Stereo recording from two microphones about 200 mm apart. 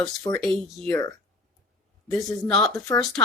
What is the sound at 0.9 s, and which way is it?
Speech, 15° left (ahead or behind).